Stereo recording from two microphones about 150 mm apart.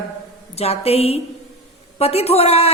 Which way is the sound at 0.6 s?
45° left (ahead or behind).